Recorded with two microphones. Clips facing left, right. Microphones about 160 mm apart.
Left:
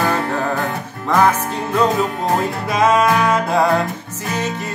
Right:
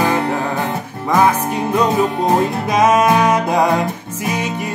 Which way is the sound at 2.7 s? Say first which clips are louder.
Right 2 dB; 20° right (ahead or behind).